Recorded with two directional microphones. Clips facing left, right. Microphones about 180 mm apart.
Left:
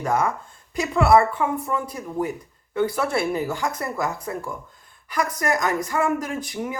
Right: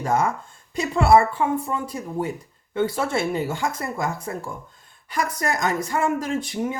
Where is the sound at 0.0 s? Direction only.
25° right (ahead or behind).